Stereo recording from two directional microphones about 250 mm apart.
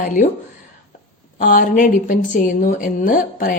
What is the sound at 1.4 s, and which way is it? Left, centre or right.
A woman's voice, left.